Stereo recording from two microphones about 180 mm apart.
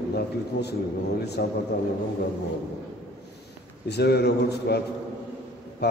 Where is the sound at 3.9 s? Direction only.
65° left (ahead or behind).